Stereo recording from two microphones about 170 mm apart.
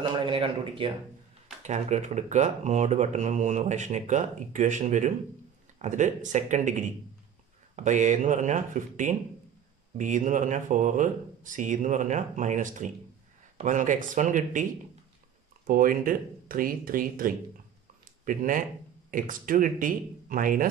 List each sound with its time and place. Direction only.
0.1 s speech: 30° right (ahead or behind)
1.6 s speech: 45° right (ahead or behind)